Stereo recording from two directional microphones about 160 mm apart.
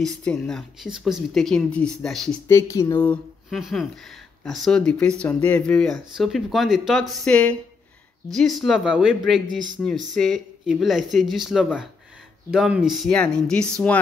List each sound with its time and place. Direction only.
0.0 s speech: 5° left (ahead or behind)
2.4 s speech: 20° left (ahead or behind)
3.4 s speech: centre (ahead or behind)